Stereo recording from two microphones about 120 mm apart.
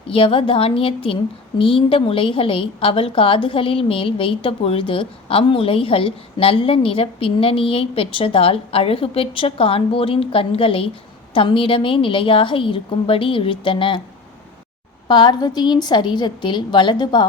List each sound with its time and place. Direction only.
0.1 s a woman's voice: 45° left (ahead or behind)
15.0 s a woman's voice: 40° left (ahead or behind)